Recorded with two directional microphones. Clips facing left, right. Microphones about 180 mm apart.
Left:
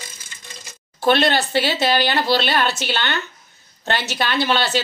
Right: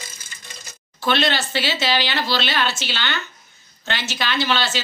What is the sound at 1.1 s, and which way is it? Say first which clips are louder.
A woman's voice: left 4 dB; 50° left (ahead or behind).